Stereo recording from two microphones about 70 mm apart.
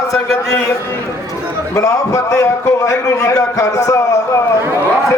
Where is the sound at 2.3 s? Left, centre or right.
Left.